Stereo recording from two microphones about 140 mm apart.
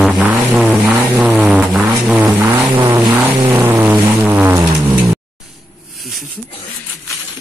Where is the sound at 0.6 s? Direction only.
10° right (ahead or behind).